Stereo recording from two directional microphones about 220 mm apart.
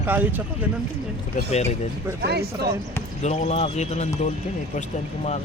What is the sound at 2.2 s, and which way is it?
Speech, 45° right (ahead or behind).